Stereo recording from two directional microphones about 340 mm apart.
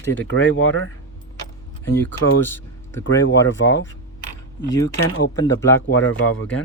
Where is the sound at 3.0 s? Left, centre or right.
Left.